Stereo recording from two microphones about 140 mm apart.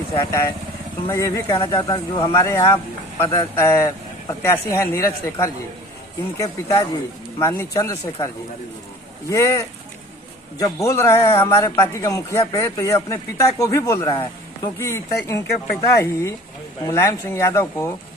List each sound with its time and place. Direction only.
0.1 s speech: 20° left (ahead or behind)
9.3 s speech: 20° left (ahead or behind)
14.8 s speech: 20° left (ahead or behind)